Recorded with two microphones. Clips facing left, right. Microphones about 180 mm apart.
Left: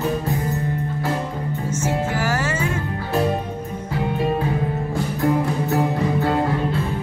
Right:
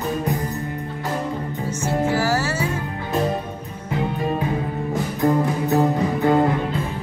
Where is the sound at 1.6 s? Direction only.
10° right (ahead or behind).